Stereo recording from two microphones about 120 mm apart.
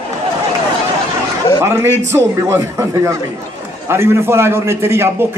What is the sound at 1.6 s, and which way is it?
A man's voice, 20° right (ahead or behind).